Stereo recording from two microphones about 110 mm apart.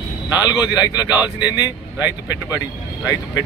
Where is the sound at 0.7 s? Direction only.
35° left (ahead or behind).